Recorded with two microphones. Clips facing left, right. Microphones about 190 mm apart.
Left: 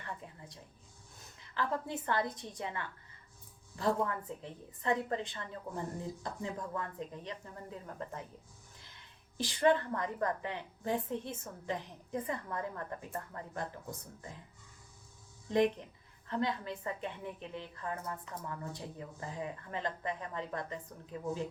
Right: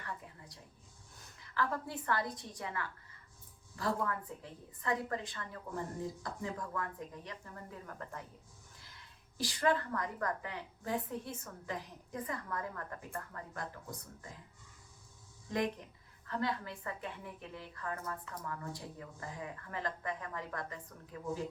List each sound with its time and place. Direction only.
0.0 s a sound: 25° left (ahead or behind)
1.4 s a woman's voice: 20° left (ahead or behind)
9.4 s a woman's voice: 25° left (ahead or behind)
15.4 s a woman's voice: 20° left (ahead or behind)